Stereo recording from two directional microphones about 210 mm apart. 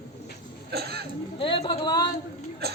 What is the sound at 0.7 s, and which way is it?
Speech, 50° right (ahead or behind).